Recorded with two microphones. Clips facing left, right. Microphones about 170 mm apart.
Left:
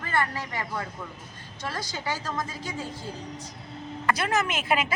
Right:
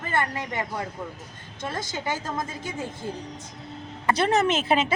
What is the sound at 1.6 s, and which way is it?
A woman's voice, 25° right (ahead or behind).